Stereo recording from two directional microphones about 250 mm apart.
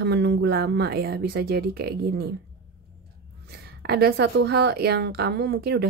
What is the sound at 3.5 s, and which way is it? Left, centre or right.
Speech, right.